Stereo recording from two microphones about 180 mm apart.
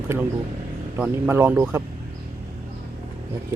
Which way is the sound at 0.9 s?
10° right (ahead or behind).